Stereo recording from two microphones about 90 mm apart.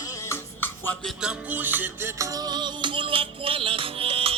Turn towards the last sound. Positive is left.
turn(degrees=-90)